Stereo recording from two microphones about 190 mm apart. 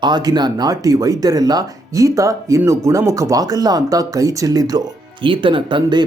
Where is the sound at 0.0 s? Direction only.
20° right (ahead or behind).